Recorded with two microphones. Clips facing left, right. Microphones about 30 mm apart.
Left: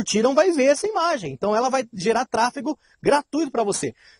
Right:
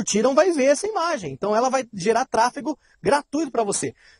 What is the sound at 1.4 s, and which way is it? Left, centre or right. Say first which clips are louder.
Speech: right 1 dB; centre.